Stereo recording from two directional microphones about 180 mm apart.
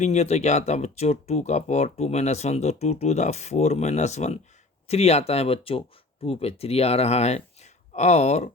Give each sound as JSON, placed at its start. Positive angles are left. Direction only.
{"t": 0.0, "sound": "speech", "side_deg": 40}